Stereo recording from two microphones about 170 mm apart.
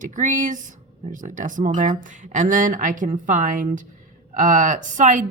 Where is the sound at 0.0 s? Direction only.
50° right (ahead or behind).